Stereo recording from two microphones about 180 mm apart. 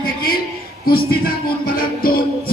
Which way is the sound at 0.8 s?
55° left (ahead or behind).